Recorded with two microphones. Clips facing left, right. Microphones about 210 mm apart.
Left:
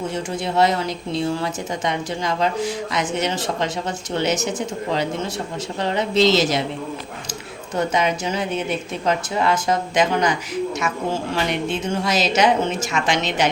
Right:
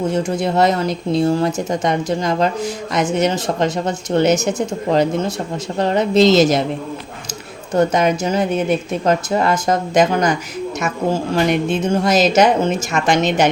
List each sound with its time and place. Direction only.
0.1 s speech: 40° right (ahead or behind)
7.8 s speech: 45° right (ahead or behind)
11.4 s speech: 45° right (ahead or behind)